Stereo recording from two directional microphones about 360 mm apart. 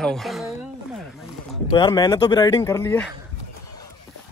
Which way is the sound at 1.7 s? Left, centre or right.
Centre.